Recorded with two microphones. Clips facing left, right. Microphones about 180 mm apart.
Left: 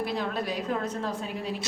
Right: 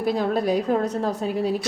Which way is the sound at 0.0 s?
40° right (ahead or behind).